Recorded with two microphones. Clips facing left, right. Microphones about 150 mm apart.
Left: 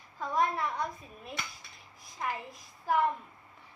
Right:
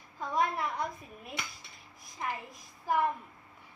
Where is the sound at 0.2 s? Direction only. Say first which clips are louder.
Left 1 dB; 10° right (ahead or behind).